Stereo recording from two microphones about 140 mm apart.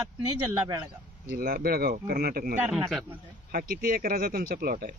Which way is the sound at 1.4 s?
90° right.